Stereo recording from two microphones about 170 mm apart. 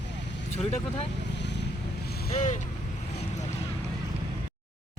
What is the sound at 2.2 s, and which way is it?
Speech, 40° left (ahead or behind).